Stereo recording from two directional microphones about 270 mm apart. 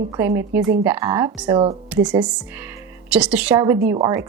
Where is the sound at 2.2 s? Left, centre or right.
Centre.